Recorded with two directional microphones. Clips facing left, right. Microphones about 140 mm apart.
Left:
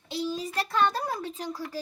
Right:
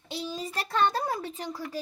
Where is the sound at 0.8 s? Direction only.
20° right (ahead or behind).